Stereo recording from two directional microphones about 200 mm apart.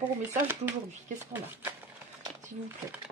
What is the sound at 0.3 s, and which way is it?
Speech, 10° right (ahead or behind).